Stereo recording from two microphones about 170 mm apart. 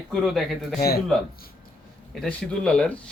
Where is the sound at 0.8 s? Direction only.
65° left (ahead or behind).